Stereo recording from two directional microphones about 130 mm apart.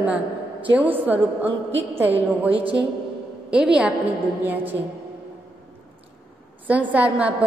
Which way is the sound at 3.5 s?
5° right (ahead or behind).